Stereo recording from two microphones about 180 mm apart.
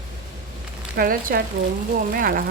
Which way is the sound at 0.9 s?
55° right (ahead or behind).